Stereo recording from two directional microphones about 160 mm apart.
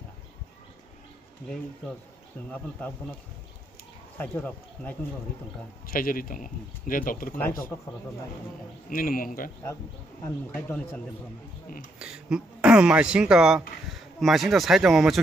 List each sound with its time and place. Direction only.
4.2 s speech: 10° left (ahead or behind)
5.9 s speech: 60° left (ahead or behind)
7.3 s speech: 10° left (ahead or behind)
8.8 s speech: 60° left (ahead or behind)
10.2 s speech: 10° left (ahead or behind)
12.0 s speech: 5° right (ahead or behind)